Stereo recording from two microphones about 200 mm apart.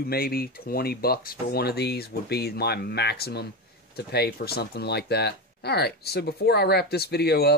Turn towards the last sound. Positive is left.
turn(degrees=50)  # may be behind; listen again after turning